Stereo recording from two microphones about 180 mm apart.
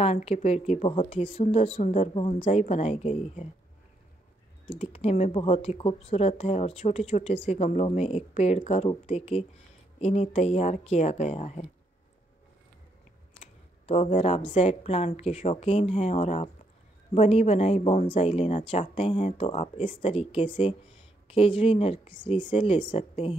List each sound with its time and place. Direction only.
0.0 s speech: 35° left (ahead or behind)
4.6 s speech: 35° left (ahead or behind)
13.8 s speech: 35° left (ahead or behind)
19.8 s speech: 45° left (ahead or behind)
20.1 s speech: 30° left (ahead or behind)
22.2 s a woman's voice: 25° left (ahead or behind)